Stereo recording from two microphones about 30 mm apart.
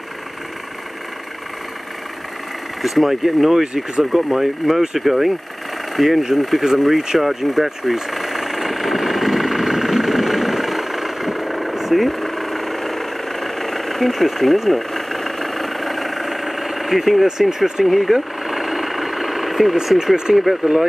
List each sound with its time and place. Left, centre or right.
2.8 s speech: centre
3.6 s speech: right
4.0 s speech: centre
6.6 s speech: centre
7.2 s vehicle: centre
17.5 s speech: centre
17.8 s speech: centre
18.5 s vehicle: centre
20.3 s speech: right